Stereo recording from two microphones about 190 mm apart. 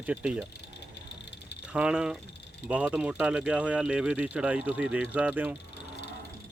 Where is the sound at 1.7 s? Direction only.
5° right (ahead or behind).